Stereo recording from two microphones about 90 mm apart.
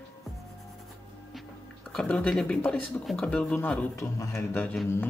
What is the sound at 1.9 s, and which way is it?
Speech, 10° left (ahead or behind).